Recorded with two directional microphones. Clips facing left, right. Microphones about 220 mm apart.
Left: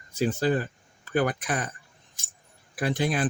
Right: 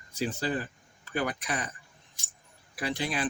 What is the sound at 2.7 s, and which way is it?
Speech, 45° left (ahead or behind).